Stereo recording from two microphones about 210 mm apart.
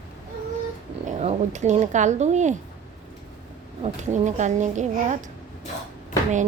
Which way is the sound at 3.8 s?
35° right (ahead or behind).